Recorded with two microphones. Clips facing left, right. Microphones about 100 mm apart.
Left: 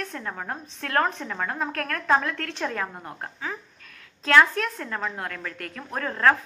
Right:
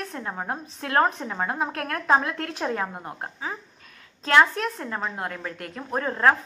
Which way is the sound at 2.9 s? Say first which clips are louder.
Right 2 dB; 10° right (ahead or behind).